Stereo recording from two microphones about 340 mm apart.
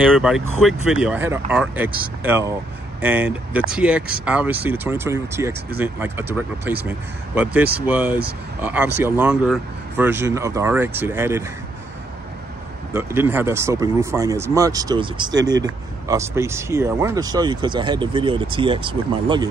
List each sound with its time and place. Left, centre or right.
0.0 s speech: centre
12.9 s speech: centre